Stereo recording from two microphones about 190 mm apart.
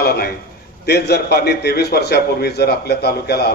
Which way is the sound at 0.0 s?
55° left (ahead or behind).